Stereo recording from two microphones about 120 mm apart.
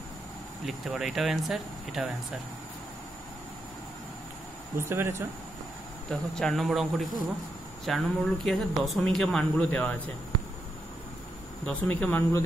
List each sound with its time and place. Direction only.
0.7 s speech: 5° right (ahead or behind)
4.7 s speech: 20° right (ahead or behind)
6.0 s speech: 5° left (ahead or behind)
11.6 s speech: 15° left (ahead or behind)